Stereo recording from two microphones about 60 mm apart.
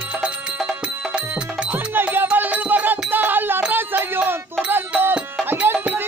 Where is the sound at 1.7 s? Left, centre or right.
Right.